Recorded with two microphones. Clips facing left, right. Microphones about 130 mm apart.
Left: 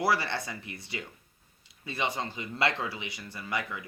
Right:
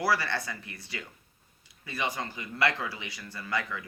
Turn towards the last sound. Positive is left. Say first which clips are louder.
# right 1 dB
turn(degrees=20)  # may be behind; listen again after turning